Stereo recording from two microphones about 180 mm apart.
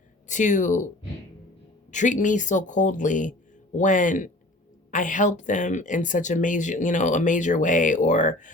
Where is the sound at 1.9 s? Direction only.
45° left (ahead or behind).